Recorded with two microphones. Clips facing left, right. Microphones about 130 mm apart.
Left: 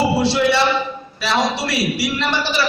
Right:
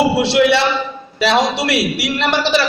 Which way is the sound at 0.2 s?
70° right (ahead or behind).